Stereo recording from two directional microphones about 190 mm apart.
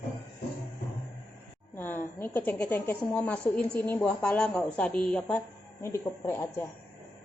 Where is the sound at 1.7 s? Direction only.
10° left (ahead or behind).